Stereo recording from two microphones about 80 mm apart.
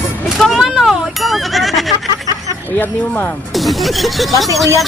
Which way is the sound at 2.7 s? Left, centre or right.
Left.